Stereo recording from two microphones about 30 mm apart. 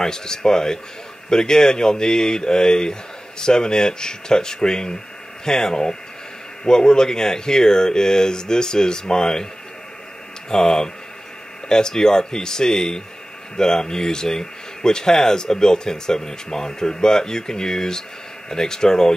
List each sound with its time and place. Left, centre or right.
0.0 s speech: left
10.5 s speech: centre